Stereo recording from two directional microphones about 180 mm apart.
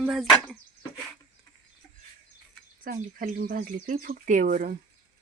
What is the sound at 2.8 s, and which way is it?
Speech, 50° right (ahead or behind).